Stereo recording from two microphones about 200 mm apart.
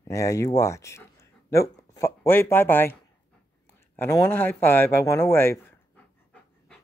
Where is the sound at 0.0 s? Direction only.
15° left (ahead or behind).